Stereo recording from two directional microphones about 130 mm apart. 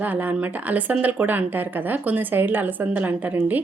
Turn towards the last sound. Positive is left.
turn(degrees=-15)  # may be behind; listen again after turning